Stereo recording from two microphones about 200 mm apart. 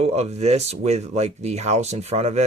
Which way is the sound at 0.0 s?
30° right (ahead or behind).